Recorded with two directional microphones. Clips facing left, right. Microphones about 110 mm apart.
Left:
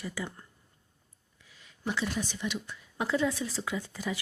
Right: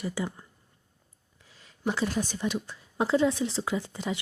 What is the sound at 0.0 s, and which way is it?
Speech, 25° right (ahead or behind).